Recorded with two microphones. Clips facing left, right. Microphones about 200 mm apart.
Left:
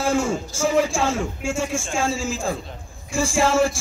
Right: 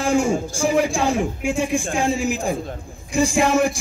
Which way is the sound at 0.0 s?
15° right (ahead or behind).